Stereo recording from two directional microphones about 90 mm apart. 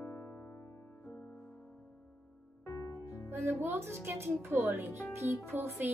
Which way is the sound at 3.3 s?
25° right (ahead or behind).